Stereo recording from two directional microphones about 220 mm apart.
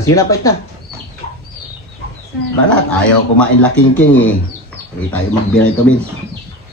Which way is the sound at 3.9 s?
10° left (ahead or behind).